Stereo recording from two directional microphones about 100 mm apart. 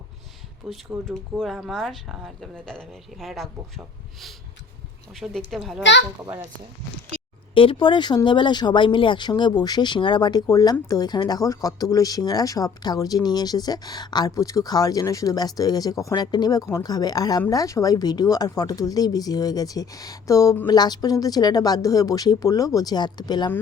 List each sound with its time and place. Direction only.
0.7 s speech: centre (ahead or behind)
7.5 s speech: 60° left (ahead or behind); by 23.5 s 45° left (ahead or behind)